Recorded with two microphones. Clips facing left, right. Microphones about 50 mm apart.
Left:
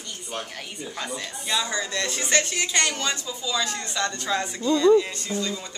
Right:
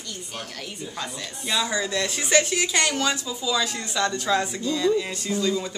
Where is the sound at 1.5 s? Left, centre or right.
Centre.